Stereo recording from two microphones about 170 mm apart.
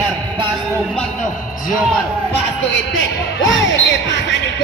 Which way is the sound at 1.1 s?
50° left (ahead or behind).